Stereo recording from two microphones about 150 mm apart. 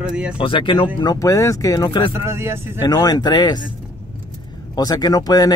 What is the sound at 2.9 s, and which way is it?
Speech, 25° left (ahead or behind).